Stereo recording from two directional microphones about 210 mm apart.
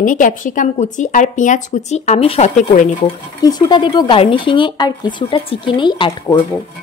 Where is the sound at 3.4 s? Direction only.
20° left (ahead or behind).